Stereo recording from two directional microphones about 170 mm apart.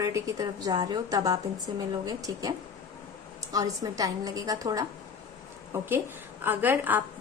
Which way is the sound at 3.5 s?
20° right (ahead or behind).